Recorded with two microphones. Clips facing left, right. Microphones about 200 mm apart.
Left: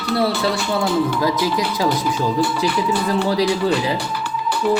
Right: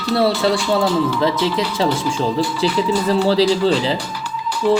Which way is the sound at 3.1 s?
30° right (ahead or behind).